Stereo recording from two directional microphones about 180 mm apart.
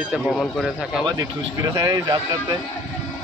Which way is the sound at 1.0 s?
20° right (ahead or behind).